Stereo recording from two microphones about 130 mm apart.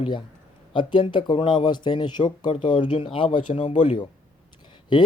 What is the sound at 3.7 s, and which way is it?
Speech, 65° left (ahead or behind).